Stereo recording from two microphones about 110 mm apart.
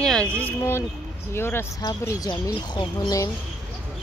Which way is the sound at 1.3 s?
20° left (ahead or behind).